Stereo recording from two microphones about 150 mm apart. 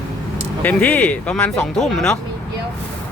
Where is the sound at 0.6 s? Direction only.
10° left (ahead or behind).